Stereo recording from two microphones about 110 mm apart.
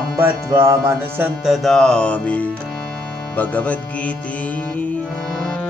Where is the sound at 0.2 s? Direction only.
30° right (ahead or behind).